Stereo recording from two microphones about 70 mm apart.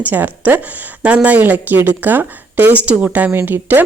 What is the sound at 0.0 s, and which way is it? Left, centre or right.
A woman's voice, right.